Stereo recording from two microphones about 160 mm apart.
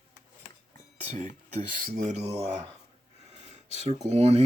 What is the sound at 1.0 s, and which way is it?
Speech, 45° right (ahead or behind).